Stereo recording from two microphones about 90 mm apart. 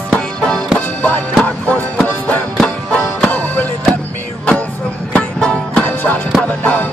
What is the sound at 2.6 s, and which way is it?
Music, 10° left (ahead or behind).